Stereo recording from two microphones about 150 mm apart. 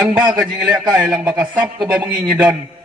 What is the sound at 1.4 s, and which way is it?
Speech, 30° right (ahead or behind).